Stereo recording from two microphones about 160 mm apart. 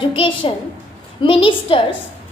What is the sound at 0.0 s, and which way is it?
A woman's voice, 30° left (ahead or behind).